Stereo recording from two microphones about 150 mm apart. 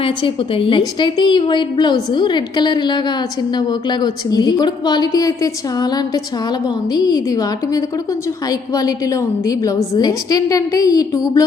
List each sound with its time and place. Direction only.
0.0 s a woman's voice: 35° left (ahead or behind)
6.9 s a woman's voice: 25° left (ahead or behind)
9.5 s a woman's voice: 20° left (ahead or behind)